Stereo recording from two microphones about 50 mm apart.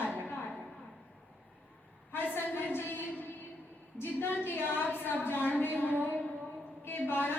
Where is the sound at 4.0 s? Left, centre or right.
Left.